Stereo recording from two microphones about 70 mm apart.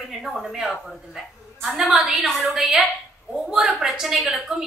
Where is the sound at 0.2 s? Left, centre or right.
Centre.